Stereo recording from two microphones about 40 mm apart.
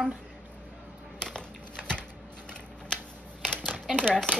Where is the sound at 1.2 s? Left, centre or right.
Left.